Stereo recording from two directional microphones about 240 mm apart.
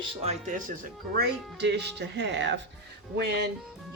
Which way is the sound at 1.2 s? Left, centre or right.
Right.